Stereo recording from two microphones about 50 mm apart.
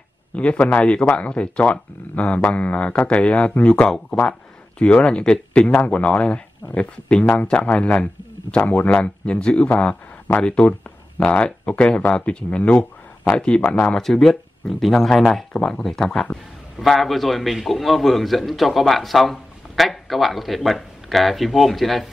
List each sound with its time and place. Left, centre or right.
0.3 s speech: left
13.9 s a man's voice: centre